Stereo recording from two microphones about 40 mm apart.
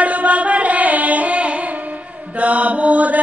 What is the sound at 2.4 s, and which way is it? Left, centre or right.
Mantra, right.